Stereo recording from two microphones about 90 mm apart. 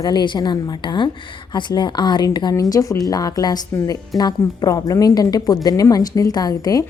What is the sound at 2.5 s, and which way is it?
A woman's voice, 40° left (ahead or behind).